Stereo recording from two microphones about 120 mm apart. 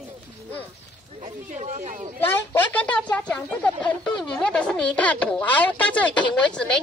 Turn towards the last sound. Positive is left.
turn(degrees=5)  # may be behind; listen again after turning